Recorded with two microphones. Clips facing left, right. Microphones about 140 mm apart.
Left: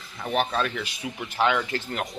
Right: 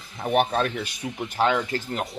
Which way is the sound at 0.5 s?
45° right (ahead or behind).